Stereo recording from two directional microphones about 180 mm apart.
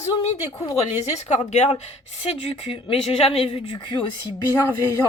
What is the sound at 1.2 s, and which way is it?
Speech, 40° left (ahead or behind).